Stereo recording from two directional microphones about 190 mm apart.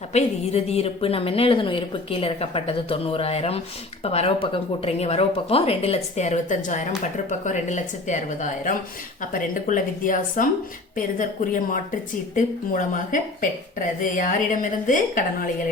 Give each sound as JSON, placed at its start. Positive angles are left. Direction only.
{"t": 0.1, "sound": "a woman's voice", "side_deg": 35}